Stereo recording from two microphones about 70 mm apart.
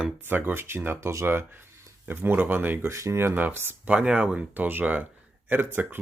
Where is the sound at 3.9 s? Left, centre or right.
Centre.